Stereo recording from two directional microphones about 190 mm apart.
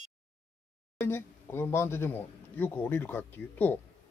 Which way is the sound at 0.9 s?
15° left (ahead or behind).